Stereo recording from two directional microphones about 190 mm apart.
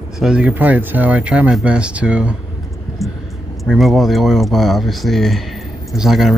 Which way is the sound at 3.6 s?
Centre (ahead or behind).